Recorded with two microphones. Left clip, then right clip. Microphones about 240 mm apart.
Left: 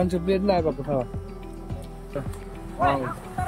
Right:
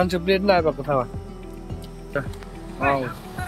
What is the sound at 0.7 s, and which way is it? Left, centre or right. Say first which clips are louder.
Speech: right 4 dB; right.